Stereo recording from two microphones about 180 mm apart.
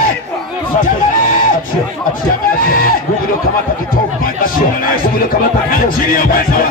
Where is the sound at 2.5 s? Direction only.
55° left (ahead or behind).